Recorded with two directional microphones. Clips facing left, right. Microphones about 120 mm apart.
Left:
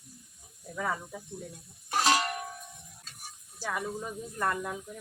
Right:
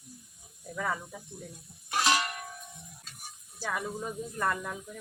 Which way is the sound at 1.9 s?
35° left (ahead or behind).